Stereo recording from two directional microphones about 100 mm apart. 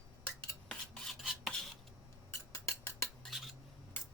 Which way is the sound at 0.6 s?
5° left (ahead or behind).